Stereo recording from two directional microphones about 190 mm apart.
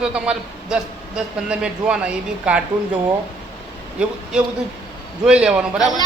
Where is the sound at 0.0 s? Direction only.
5° right (ahead or behind).